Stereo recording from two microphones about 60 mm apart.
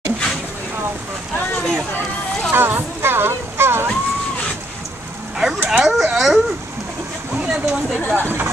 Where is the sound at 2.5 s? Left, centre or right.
Right.